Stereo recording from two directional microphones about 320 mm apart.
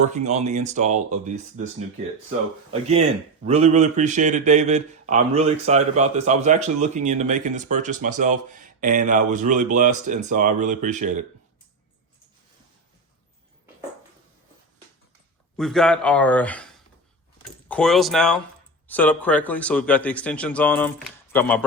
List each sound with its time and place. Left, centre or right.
0.0 s a man's voice: right
3.4 s a man's voice: right
15.5 s speech: centre
17.7 s speech: centre